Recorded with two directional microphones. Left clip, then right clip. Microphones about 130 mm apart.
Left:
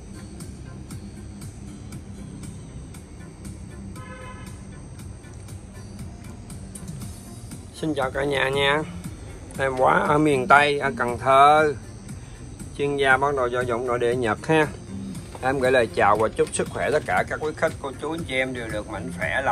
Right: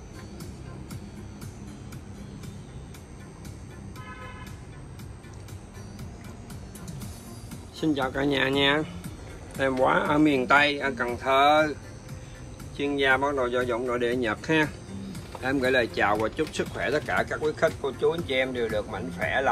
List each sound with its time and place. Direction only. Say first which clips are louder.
7.8 s speech: left 2 dB; 25° right (ahead or behind); by 11.7 s centre (ahead or behind)
12.7 s speech: left 4 dB; centre (ahead or behind)
17.0 s speech: left 3 dB; 25° right (ahead or behind)
19.2 s speech: left 1 dB; 50° right (ahead or behind)